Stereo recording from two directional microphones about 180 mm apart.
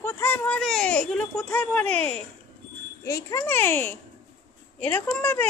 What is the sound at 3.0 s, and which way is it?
A child's voice, 15° left (ahead or behind).